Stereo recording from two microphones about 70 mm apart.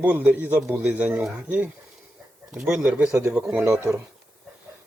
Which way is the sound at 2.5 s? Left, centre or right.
Centre.